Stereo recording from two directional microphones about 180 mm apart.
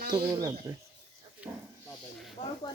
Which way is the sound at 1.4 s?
10° right (ahead or behind).